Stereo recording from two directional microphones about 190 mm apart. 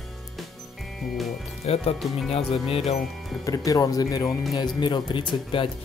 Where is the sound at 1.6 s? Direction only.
35° left (ahead or behind).